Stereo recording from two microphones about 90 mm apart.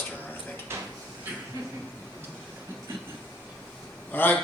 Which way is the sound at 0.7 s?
25° right (ahead or behind).